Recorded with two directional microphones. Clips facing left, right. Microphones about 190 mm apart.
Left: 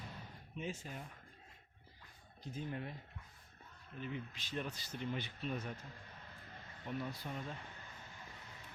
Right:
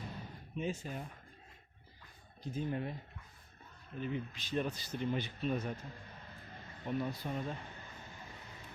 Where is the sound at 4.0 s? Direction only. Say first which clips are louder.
Right 6 dB; 35° right (ahead or behind).